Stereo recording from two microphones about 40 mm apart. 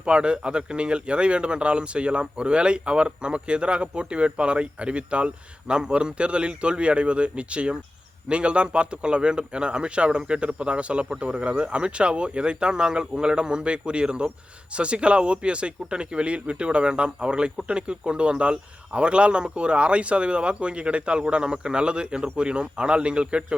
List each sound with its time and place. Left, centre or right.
0.0 s speech: right